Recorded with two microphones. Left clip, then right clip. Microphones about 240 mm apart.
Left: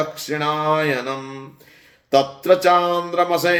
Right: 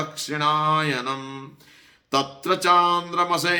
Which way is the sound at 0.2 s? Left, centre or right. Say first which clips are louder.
Even; centre.